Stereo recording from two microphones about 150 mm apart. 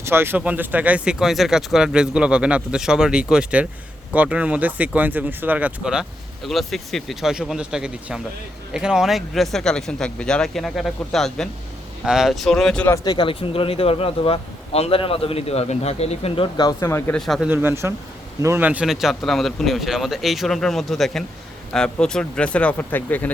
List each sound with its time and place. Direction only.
0.0 s speech: 15° right (ahead or behind); by 12.9 s 5° left (ahead or behind)
12.9 s speech: 30° left (ahead or behind)
17.1 s speech: centre (ahead or behind)
17.5 s speech: 15° right (ahead or behind); by 23.3 s 10° left (ahead or behind)